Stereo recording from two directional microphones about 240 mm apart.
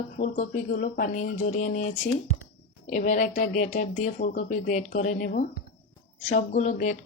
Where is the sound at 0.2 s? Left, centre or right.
Left.